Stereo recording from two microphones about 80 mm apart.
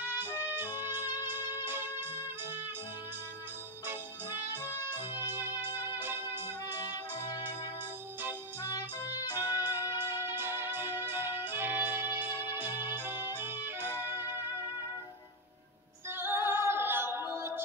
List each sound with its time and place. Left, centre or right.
0.0 s music: right
5.1 s music: right
6.8 s music: left
8.6 s music: left
9.4 s music: right
16.1 s female singing: right